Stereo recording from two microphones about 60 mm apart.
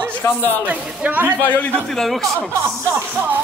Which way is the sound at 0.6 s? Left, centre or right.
Right.